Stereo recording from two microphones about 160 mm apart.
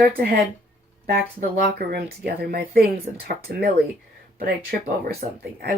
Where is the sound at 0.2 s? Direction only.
70° right (ahead or behind).